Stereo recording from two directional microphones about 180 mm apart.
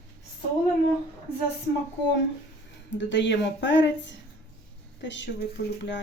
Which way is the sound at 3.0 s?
85° left.